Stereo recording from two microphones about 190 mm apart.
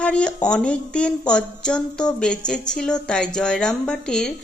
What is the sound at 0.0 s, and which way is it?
A woman's voice, 5° left (ahead or behind).